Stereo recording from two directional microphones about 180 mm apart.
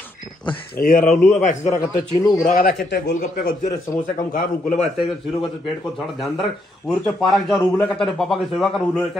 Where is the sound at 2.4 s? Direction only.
55° left (ahead or behind).